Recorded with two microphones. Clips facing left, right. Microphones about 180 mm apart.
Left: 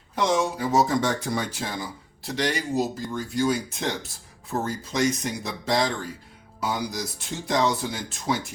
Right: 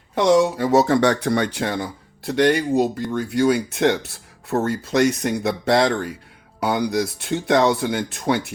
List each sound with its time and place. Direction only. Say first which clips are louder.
0.1 s speech: right 7 dB; 70° right (ahead or behind)